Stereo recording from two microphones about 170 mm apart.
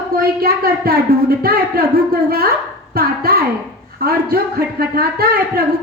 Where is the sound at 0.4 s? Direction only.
60° right (ahead or behind).